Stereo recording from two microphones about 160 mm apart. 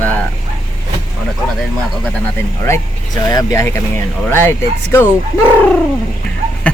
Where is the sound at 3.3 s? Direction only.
25° left (ahead or behind).